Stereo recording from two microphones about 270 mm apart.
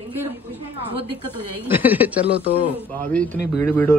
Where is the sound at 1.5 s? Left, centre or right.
Centre.